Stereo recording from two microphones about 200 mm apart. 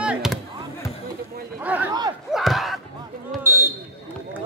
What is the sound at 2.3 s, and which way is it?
Battle cry, centre (ahead or behind).